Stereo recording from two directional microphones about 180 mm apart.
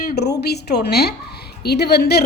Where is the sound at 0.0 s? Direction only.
65° left (ahead or behind).